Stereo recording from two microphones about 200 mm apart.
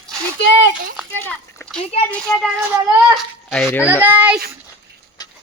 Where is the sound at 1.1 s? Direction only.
10° left (ahead or behind).